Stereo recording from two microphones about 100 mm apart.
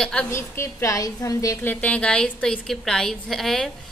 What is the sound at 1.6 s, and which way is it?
A woman's voice, 15° left (ahead or behind).